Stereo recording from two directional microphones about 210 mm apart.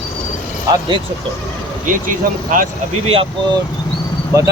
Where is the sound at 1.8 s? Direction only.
40° right (ahead or behind).